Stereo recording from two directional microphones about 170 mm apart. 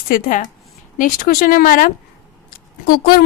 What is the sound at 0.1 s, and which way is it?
A woman's voice, 50° left (ahead or behind).